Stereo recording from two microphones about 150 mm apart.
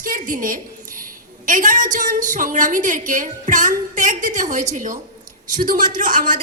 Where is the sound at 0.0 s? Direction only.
65° right (ahead or behind).